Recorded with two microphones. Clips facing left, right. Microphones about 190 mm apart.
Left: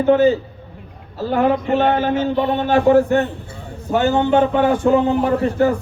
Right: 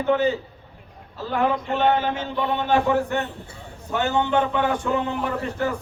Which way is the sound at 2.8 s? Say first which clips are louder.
Left 9 dB; 40° left (ahead or behind).